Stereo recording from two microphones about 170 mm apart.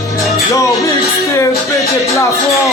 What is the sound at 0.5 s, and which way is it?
Music, 20° left (ahead or behind).